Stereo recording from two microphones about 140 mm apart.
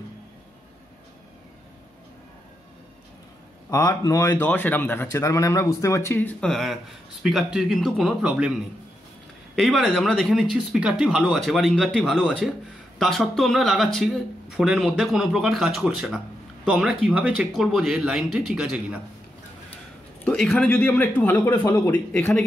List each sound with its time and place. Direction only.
3.7 s a man's voice: 25° left (ahead or behind)
4.4 s a man's voice: 10° left (ahead or behind)
6.4 s speech: centre (ahead or behind)
9.6 s speech: centre (ahead or behind)
20.2 s a man's voice: 10° left (ahead or behind)
21.6 s a man's voice: 25° left (ahead or behind)
22.1 s a man's voice: 10° left (ahead or behind)